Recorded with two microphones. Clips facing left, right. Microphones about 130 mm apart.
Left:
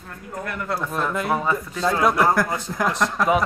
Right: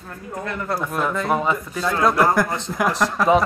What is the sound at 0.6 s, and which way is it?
Speech, 10° right (ahead or behind).